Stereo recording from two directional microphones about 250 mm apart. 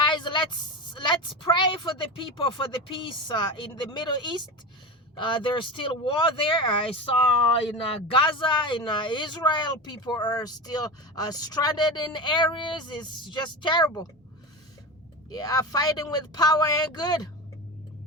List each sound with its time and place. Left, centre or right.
0.0 s a sound: centre
0.9 s a woman's voice: centre
8.1 s speech: centre
15.3 s speech: centre